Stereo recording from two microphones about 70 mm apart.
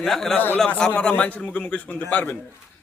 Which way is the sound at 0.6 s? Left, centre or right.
Centre.